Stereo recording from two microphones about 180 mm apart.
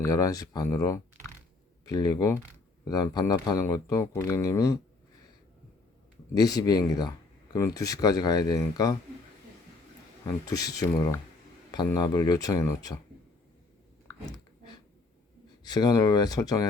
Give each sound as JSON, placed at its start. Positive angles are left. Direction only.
{"t": 0.0, "sound": "speech", "side_deg": 20}
{"t": 6.3, "sound": "speech", "side_deg": 20}
{"t": 10.2, "sound": "speech", "side_deg": 20}
{"t": 14.3, "sound": "dog", "side_deg": 20}
{"t": 15.6, "sound": "speech", "side_deg": 20}